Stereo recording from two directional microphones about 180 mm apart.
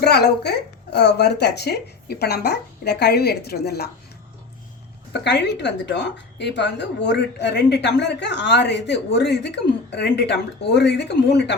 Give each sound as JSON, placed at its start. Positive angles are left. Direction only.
{"t": 0.0, "sound": "speech", "side_deg": 65}
{"t": 5.2, "sound": "a woman's voice", "side_deg": 70}